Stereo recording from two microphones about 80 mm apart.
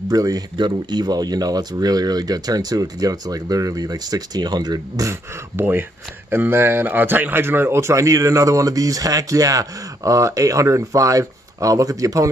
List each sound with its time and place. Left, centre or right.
0.1 s speech: right
0.6 s speech: right
5.6 s speech: right